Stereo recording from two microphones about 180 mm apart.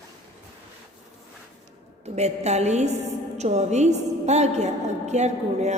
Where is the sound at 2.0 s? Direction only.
40° right (ahead or behind).